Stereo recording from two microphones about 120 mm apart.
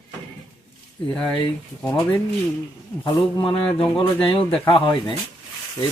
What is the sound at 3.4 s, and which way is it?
Speech, 45° left (ahead or behind).